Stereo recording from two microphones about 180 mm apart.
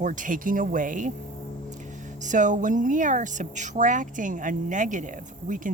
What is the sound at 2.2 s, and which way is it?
Speech, 45° right (ahead or behind).